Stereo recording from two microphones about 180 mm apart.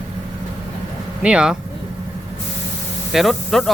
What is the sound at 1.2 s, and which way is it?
Speech, 5° right (ahead or behind).